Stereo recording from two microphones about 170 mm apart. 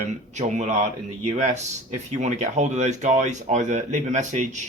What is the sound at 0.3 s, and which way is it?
Speech, 45° right (ahead or behind).